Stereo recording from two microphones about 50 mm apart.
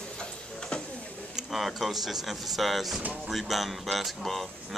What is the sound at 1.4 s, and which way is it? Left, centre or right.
A man's voice, centre.